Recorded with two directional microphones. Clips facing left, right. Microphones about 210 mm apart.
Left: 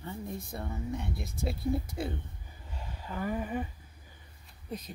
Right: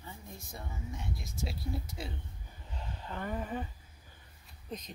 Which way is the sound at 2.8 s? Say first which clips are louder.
Left 3 dB; 5° left (ahead or behind).